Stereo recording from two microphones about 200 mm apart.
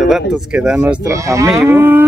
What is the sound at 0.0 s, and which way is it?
Speech, 5° right (ahead or behind).